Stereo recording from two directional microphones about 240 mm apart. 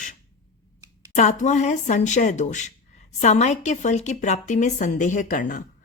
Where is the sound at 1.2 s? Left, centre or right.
Left.